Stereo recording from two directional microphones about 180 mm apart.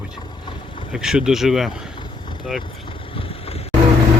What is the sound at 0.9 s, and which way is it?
Speech, 5° right (ahead or behind).